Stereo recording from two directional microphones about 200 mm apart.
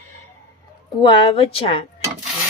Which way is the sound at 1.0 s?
25° left (ahead or behind).